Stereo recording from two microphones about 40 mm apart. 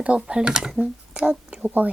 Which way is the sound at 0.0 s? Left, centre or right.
Right.